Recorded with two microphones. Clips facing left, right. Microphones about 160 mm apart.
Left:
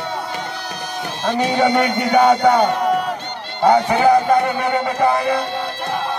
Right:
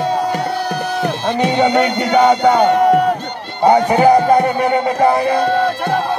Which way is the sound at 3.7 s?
45° right (ahead or behind).